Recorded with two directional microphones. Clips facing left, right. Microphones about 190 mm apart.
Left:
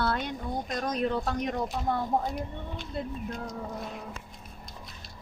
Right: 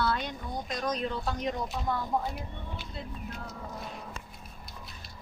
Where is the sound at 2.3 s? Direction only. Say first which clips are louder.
Left 4 dB; 5° right (ahead or behind).